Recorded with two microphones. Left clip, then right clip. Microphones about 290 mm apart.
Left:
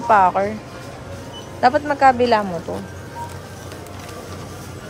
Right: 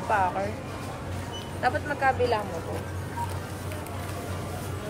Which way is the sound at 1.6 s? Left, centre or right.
Left.